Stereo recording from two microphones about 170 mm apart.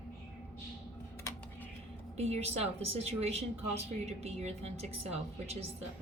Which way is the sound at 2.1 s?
40° right (ahead or behind).